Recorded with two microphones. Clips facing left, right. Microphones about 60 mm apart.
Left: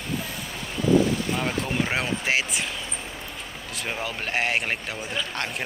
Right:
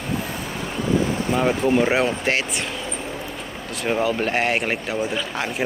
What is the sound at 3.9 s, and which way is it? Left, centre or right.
Speech, centre.